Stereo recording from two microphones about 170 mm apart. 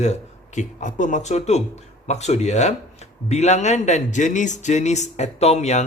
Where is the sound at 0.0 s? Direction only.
45° left (ahead or behind).